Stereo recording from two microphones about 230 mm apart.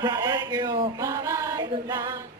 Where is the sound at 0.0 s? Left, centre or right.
Centre.